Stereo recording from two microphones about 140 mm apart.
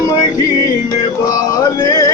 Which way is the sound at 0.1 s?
25° left (ahead or behind).